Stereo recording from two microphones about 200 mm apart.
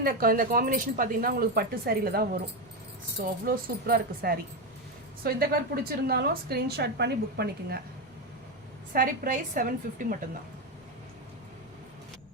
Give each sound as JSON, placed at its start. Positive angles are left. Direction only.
{"t": 0.0, "sound": "a woman's voice", "side_deg": -45}
{"t": 8.9, "sound": "a woman's voice", "side_deg": -45}